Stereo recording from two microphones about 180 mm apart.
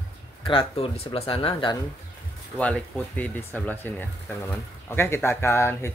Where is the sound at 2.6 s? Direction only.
10° left (ahead or behind).